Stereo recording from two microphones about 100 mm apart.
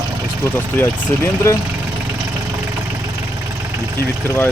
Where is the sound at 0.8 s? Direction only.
25° left (ahead or behind).